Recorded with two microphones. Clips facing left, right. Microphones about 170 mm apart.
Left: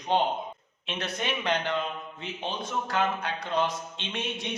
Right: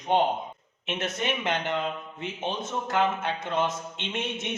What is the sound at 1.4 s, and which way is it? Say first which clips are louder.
Speech: left 3 dB; 20° right (ahead or behind).